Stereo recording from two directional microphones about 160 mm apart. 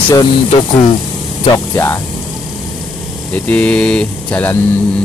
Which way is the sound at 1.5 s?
15° left (ahead or behind).